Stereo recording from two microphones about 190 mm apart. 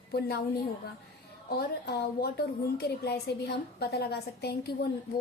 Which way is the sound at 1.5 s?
55° left (ahead or behind).